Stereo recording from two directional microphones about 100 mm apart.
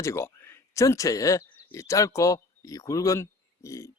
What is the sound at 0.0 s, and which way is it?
A man's voice, 30° left (ahead or behind).